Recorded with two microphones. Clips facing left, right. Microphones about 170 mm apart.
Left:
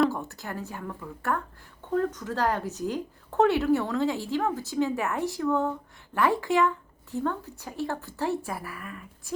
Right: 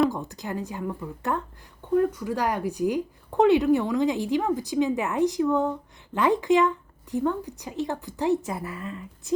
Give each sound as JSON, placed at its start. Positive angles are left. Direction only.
{"t": 0.1, "sound": "a woman's voice", "side_deg": -15}